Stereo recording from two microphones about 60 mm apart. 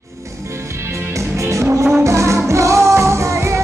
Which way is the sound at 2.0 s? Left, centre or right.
Right.